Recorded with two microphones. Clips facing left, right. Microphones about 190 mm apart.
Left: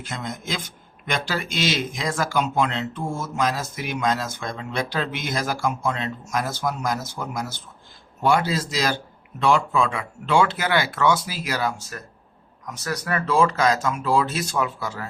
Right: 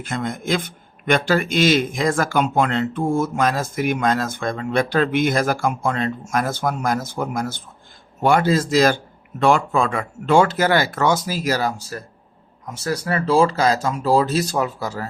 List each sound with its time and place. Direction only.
0.0 s speech: 55° right (ahead or behind); by 15.0 s 40° right (ahead or behind)